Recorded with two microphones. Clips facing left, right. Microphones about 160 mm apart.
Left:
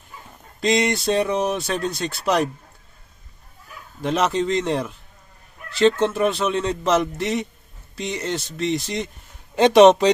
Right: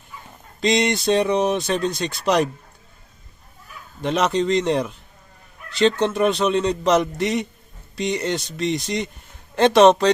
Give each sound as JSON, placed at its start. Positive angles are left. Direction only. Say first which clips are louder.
{"t": 0.6, "sound": "a man's voice", "louder": "right 1 dB", "side_deg": 5}
{"t": 4.0, "sound": "a man's voice", "louder": "right 1 dB", "side_deg": 5}
{"t": 9.6, "sound": "speech", "louder": "left 1 dB", "side_deg": 15}